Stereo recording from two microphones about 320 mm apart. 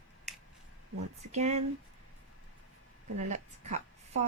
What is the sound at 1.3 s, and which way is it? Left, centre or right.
Speech, right.